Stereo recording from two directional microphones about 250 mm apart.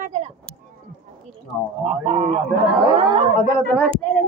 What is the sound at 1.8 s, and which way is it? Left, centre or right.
Speech, right.